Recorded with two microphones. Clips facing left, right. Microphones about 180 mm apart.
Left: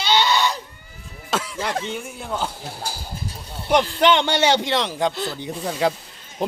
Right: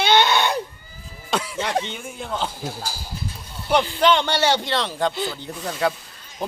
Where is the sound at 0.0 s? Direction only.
55° right (ahead or behind).